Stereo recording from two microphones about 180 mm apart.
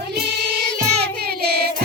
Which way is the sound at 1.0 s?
60° right (ahead or behind).